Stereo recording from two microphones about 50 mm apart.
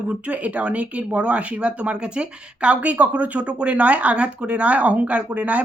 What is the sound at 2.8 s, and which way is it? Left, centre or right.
Speech, right.